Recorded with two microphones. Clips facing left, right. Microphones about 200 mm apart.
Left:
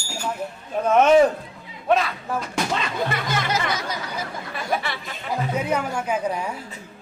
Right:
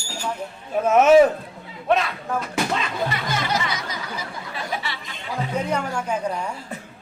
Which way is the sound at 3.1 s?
50° left (ahead or behind).